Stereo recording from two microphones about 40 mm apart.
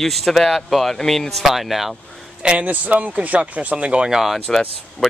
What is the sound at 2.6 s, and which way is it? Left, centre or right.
Speech, right.